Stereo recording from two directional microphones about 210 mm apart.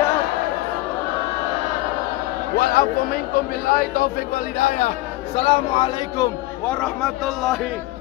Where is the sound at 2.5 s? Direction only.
45° left (ahead or behind); by 5.8 s 30° left (ahead or behind).